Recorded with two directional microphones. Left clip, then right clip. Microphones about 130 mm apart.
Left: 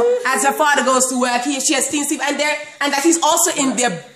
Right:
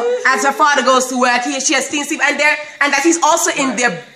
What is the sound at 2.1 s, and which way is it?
A woman's voice, 5° left (ahead or behind).